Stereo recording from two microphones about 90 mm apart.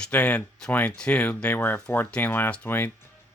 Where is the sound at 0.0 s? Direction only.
15° left (ahead or behind).